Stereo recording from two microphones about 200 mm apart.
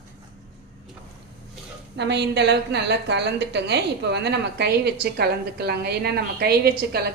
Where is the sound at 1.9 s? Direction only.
60° right (ahead or behind).